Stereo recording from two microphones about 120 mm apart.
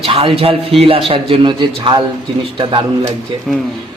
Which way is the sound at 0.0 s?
50° right (ahead or behind).